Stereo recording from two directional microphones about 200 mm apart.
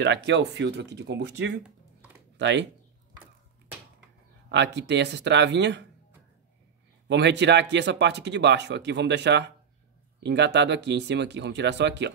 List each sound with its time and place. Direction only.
0.0 s speech: 60° right (ahead or behind)
4.5 s speech: 60° right (ahead or behind)
7.1 s speech: 60° right (ahead or behind)